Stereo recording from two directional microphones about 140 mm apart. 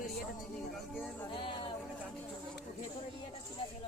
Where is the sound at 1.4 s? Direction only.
40° left (ahead or behind).